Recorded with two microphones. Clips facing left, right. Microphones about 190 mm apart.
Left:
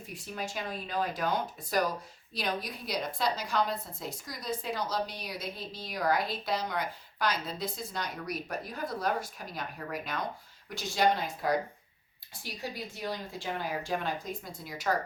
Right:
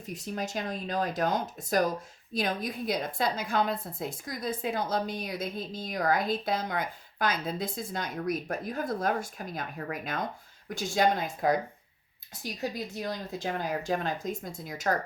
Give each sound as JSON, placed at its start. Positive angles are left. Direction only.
{"t": 0.1, "sound": "a woman's voice", "side_deg": -40}
{"t": 13.4, "sound": "a woman's voice", "side_deg": -45}